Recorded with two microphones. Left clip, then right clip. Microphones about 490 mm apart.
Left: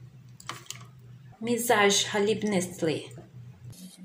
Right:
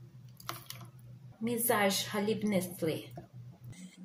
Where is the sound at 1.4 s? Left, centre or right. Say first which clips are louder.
Left 7 dB; right.